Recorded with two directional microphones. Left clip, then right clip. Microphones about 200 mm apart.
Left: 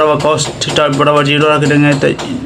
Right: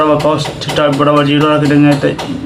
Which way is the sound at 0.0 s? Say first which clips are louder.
Even; 40° left (ahead or behind).